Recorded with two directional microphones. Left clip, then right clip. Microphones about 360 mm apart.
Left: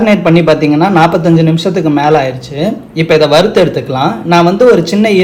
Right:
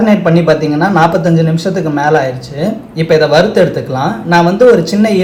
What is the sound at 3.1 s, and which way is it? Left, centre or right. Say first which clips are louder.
A man's voice: left 1 dB; centre.